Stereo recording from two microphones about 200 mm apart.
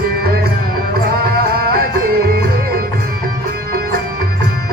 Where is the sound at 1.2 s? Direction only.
50° right (ahead or behind).